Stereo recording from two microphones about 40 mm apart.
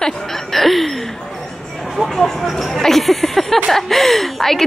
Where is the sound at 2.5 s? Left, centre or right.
Centre.